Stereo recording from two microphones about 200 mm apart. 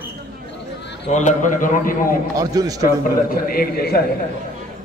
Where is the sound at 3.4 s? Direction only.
50° left (ahead or behind).